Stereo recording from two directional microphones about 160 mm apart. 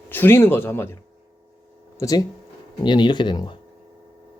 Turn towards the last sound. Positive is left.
turn(degrees=30)  # may be behind; listen again after turning